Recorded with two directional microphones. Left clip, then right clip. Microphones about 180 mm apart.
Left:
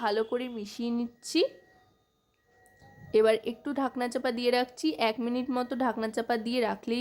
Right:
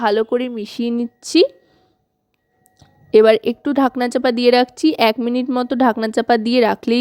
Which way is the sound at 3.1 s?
40° right (ahead or behind).